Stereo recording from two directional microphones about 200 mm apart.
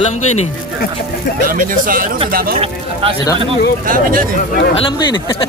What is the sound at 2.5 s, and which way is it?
Speech, 25° right (ahead or behind).